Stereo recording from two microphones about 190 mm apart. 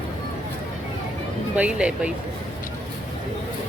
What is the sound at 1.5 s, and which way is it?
Speech, 5° right (ahead or behind).